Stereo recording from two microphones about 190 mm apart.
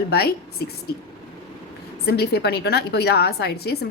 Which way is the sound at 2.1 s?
60° left (ahead or behind).